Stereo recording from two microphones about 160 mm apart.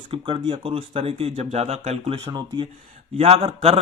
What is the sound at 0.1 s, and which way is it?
Speech, 30° right (ahead or behind).